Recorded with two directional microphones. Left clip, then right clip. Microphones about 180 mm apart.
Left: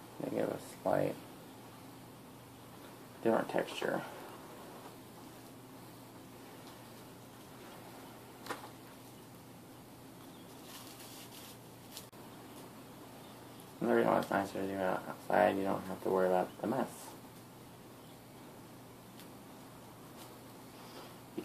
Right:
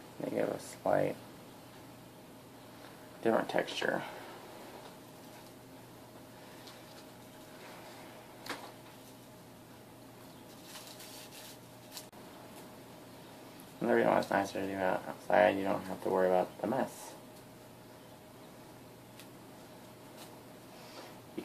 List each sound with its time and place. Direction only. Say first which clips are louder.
0.4 s speech: right 2 dB; centre (ahead or behind)
3.3 s speech: right 2 dB; 5° left (ahead or behind)
13.7 s speech: right 2 dB; centre (ahead or behind)